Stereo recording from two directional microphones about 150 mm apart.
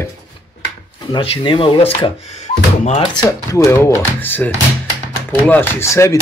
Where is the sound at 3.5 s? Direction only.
20° left (ahead or behind).